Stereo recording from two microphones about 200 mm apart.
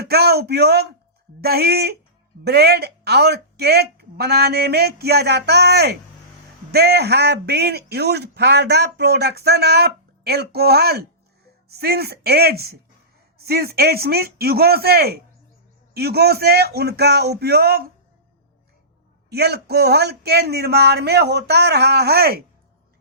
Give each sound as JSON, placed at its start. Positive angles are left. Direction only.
{"t": 0.0, "sound": "speech", "side_deg": -50}
{"t": 19.3, "sound": "speech", "side_deg": -55}